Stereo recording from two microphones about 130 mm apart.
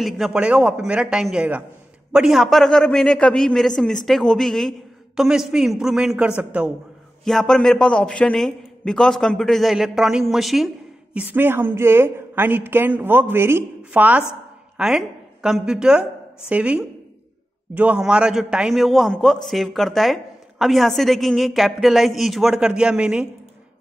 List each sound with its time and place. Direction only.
0.0 s a man's voice: 5° right (ahead or behind)
7.2 s a man's voice: 5° left (ahead or behind)
11.1 s a woman's voice: 15° right (ahead or behind)